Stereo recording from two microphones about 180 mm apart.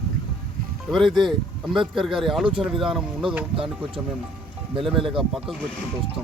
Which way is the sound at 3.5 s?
30° right (ahead or behind).